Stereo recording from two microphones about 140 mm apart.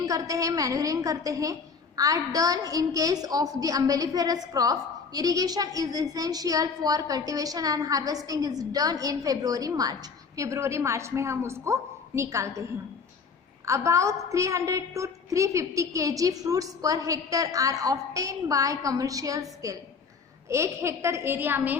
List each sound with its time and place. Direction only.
0.0 s a woman's voice: 25° right (ahead or behind)
13.7 s a woman's voice: 20° right (ahead or behind)